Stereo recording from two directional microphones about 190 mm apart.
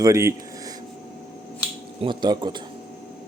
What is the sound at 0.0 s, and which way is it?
Speech, 15° right (ahead or behind).